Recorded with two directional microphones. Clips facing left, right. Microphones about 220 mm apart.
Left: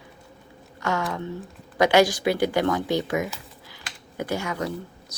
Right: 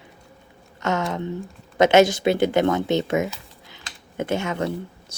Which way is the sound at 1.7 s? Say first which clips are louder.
Right 3 dB; 25° right (ahead or behind).